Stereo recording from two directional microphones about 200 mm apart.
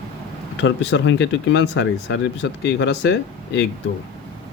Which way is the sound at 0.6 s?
60° left (ahead or behind).